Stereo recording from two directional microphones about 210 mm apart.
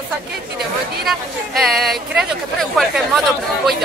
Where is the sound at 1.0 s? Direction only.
Centre (ahead or behind).